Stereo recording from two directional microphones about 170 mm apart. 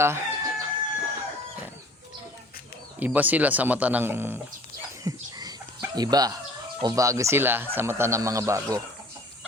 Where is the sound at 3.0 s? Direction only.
10° right (ahead or behind).